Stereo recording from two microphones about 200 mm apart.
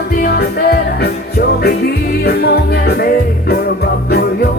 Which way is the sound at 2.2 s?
55° left (ahead or behind).